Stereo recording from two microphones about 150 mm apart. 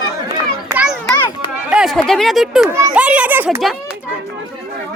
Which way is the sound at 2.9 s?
10° right (ahead or behind).